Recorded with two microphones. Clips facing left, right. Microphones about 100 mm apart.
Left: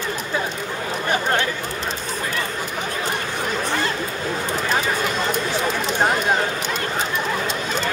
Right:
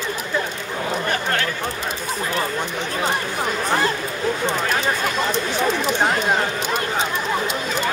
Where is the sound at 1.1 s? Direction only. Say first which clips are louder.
Left 2 dB; 20° left (ahead or behind).